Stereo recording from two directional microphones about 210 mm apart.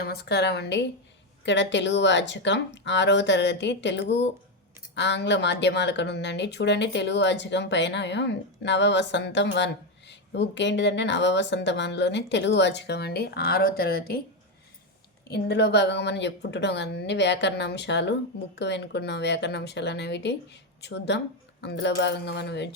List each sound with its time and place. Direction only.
0.0 s a woman's voice: 50° left (ahead or behind)
15.3 s speech: 55° left (ahead or behind)